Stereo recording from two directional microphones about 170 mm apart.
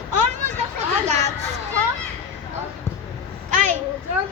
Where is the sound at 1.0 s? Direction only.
40° right (ahead or behind).